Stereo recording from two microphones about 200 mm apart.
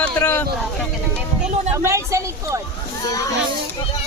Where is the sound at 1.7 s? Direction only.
15° right (ahead or behind).